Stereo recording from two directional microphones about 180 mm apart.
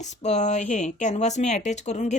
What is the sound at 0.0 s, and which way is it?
A woman's voice, 40° left (ahead or behind).